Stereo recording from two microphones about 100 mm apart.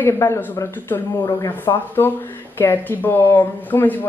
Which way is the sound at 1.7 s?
40° left (ahead or behind).